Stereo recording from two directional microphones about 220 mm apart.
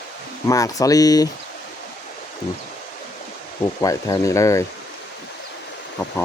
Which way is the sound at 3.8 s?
15° left (ahead or behind).